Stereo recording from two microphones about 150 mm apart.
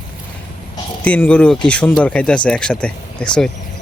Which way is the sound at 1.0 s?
10° left (ahead or behind).